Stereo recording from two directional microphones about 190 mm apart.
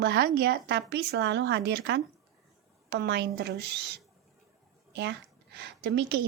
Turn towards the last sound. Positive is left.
turn(degrees=-60)  # may be behind; listen again after turning